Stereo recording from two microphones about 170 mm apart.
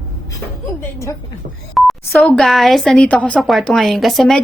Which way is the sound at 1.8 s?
Centre (ahead or behind).